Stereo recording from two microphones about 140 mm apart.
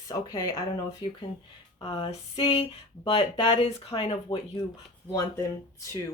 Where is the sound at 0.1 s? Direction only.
25° left (ahead or behind).